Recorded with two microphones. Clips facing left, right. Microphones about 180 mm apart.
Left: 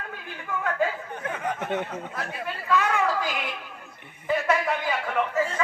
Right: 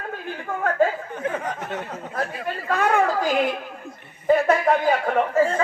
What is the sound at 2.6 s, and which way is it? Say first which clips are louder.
Speech: right 4 dB; 50° right (ahead or behind).